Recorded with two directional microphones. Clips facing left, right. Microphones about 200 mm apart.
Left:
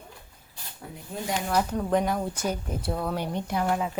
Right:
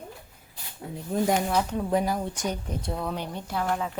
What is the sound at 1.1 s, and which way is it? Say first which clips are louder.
Speech: right 9 dB; 45° right (ahead or behind).